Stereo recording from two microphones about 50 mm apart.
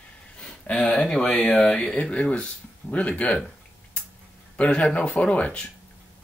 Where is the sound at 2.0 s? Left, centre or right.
Left.